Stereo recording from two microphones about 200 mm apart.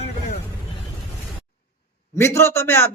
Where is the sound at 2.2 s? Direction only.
15° left (ahead or behind).